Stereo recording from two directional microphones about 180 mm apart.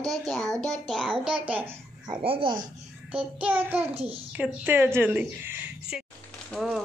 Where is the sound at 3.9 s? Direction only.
35° right (ahead or behind).